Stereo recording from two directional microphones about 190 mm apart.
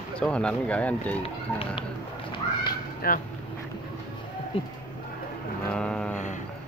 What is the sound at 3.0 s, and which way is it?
Speech, 50° left (ahead or behind).